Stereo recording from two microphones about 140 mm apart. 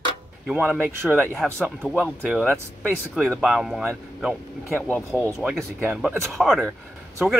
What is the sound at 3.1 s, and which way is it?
Speech, 5° right (ahead or behind).